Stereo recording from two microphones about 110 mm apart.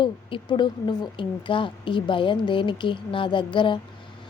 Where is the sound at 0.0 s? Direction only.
50° left (ahead or behind).